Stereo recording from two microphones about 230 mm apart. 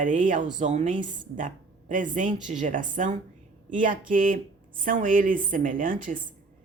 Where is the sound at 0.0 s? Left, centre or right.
Right.